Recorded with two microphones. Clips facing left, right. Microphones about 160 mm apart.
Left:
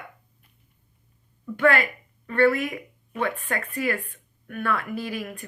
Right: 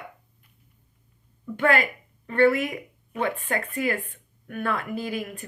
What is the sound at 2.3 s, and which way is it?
Speech, 20° right (ahead or behind).